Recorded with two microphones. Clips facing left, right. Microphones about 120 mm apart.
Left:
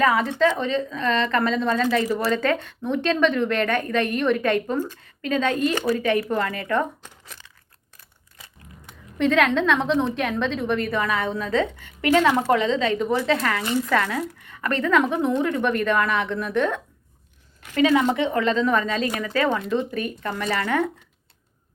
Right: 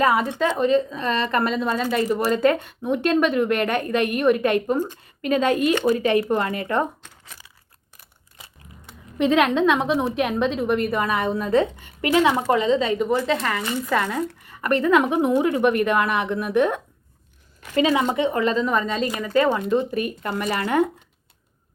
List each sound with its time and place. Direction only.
0.3 s speech: 15° right (ahead or behind)
8.4 s scissors: 20° right (ahead or behind)
9.1 s speech: 15° right (ahead or behind)
14.5 s speech: 15° right (ahead or behind)
17.8 s a woman's voice: 10° right (ahead or behind)
19.2 s speech: 15° right (ahead or behind)